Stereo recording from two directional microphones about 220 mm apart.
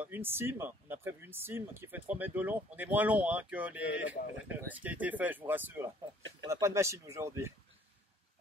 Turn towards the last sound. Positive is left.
turn(degrees=-10)  # may be behind; listen again after turning